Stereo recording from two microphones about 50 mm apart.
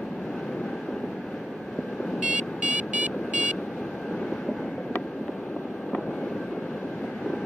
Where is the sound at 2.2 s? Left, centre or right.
Right.